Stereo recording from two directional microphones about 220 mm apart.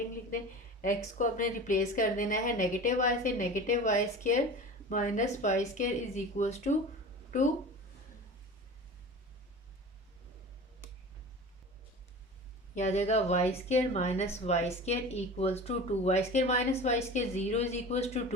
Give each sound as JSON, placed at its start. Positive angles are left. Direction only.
{"t": 0.8, "sound": "a woman's voice", "side_deg": 35}
{"t": 12.7, "sound": "a woman's voice", "side_deg": 30}